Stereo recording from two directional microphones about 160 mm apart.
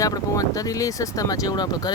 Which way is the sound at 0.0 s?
20° left (ahead or behind).